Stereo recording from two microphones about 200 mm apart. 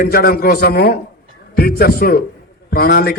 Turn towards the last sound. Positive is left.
turn(degrees=50)  # may be behind; listen again after turning